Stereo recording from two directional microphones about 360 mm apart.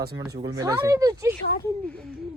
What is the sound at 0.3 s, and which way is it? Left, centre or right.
Speech, centre.